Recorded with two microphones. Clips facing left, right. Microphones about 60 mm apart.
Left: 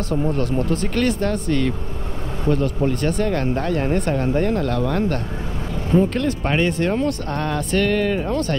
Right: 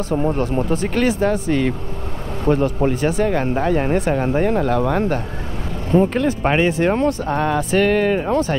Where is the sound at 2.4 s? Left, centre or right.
Right.